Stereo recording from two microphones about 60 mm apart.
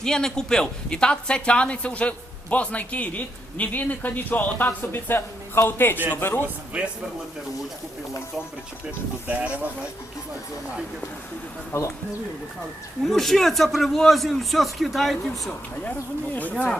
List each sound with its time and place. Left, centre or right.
0.0 s a woman's voice: centre; by 6.4 s left
6.7 s speech: centre
9.2 s speech: right
11.7 s speech: left
13.1 s a man's voice: centre
16.3 s a woman's voice: left